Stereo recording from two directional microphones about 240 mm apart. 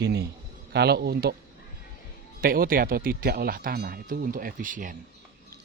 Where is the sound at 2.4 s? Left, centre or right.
Right.